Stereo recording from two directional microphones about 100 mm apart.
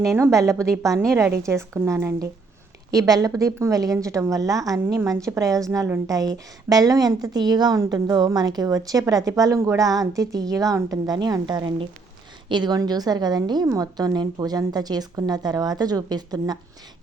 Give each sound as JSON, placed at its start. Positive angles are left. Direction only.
{"t": 0.2, "sound": "a woman's voice", "side_deg": -30}